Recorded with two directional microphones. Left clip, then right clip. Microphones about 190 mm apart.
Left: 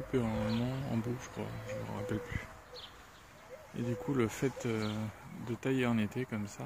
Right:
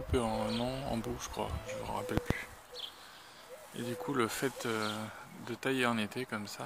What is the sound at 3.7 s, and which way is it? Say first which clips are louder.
Speech: right 1 dB; 5° right (ahead or behind).